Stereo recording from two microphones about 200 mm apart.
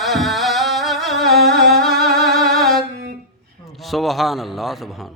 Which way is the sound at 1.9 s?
50° right (ahead or behind).